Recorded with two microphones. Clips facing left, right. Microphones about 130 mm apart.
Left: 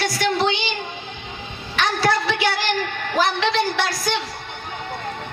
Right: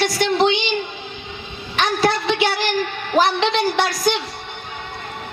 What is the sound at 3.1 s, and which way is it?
A woman's voice, 20° right (ahead or behind).